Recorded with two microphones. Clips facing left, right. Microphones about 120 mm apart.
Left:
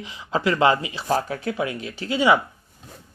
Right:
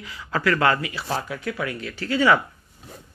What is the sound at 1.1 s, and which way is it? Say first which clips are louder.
Speech: left 6 dB; 40° left (ahead or behind).